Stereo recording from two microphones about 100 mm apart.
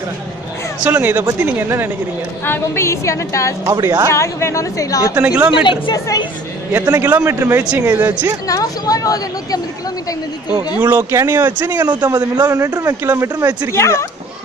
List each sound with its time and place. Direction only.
0.8 s speech: 20° right (ahead or behind)
2.4 s a woman's voice: 25° left (ahead or behind)
3.6 s a man's voice: 35° right (ahead or behind)
4.1 s speech: 30° left (ahead or behind)
5.1 s speech: 15° right (ahead or behind)
5.5 s a woman's voice: 55° left (ahead or behind)
6.7 s speech: 25° right (ahead or behind)
8.5 s speech: 35° left (ahead or behind)
10.8 s speech: 20° right (ahead or behind)
11.9 s a man's voice: 40° right (ahead or behind)
13.7 s a woman's voice: 30° left (ahead or behind)